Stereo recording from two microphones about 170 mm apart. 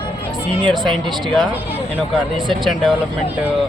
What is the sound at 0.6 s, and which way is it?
Speech, 30° right (ahead or behind).